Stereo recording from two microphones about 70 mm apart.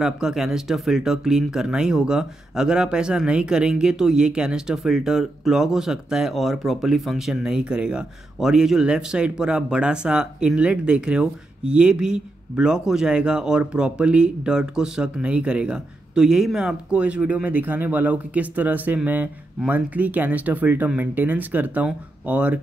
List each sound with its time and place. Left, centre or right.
0.0 s speech: centre